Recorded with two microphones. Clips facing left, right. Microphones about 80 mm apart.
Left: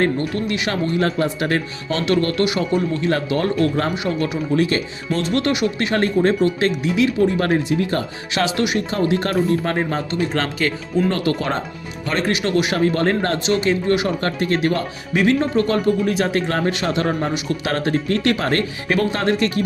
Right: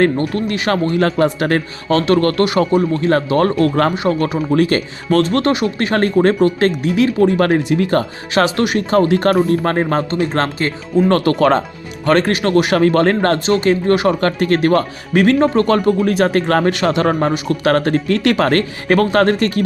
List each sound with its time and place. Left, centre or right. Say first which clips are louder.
0.2 s speech: right 3 dB; right
11.1 s speech: right 8 dB; right
12.7 s speech: right 5 dB; right
13.4 s speech: right 4 dB; right
14.1 s speech: right 5 dB; right
16.1 s speech: right 6 dB; right
17.3 s speech: right 7 dB; right
18.1 s speech: right 6 dB; right
18.9 s speech: right 6 dB; right